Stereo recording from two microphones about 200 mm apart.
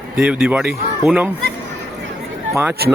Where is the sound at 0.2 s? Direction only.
5° right (ahead or behind).